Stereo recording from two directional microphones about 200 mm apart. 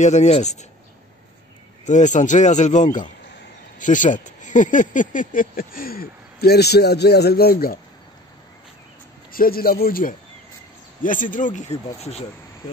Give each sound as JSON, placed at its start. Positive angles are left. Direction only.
{"t": 0.0, "sound": "speech", "side_deg": 35}
{"t": 1.9, "sound": "speech", "side_deg": 35}
{"t": 9.3, "sound": "speech", "side_deg": 45}